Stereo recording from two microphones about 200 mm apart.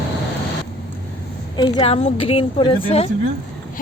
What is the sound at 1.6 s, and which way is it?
A woman's voice, 25° left (ahead or behind).